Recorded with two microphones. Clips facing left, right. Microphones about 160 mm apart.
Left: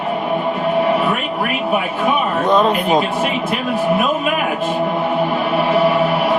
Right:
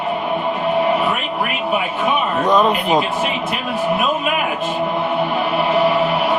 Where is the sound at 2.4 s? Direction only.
35° left (ahead or behind).